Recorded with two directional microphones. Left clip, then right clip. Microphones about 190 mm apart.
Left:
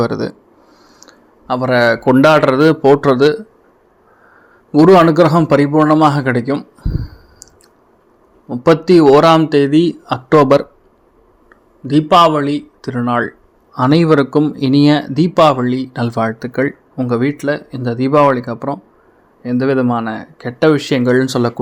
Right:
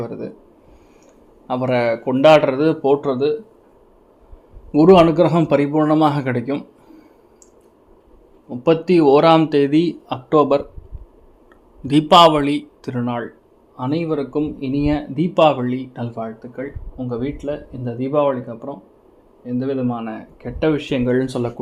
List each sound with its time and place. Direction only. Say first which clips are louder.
0.0 s speech: left 11 dB; 35° left (ahead or behind)
1.5 s a man's voice: left 6 dB; 10° left (ahead or behind)
2.0 s speech: even; 30° left (ahead or behind)
4.7 s a man's voice: left 3 dB; 20° left (ahead or behind)
8.4 s a man's voice: left 5 dB; 25° left (ahead or behind)
11.9 s a man's voice: left 1 dB; 5° left (ahead or behind)
13.7 s speech: left 10 dB; 40° left (ahead or behind)
14.4 s speech: left 9 dB; 30° left (ahead or behind)
16.1 s speech: left 14 dB; 45° left (ahead or behind)
17.4 s speech: left 8 dB; 25° left (ahead or behind)